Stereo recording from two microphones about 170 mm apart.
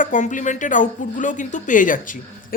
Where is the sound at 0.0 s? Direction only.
50° left (ahead or behind).